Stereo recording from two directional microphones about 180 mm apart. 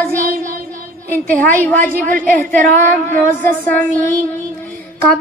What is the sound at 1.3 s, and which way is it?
Speech, 10° left (ahead or behind).